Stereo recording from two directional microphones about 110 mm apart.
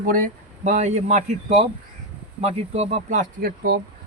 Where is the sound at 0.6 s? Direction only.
90° right.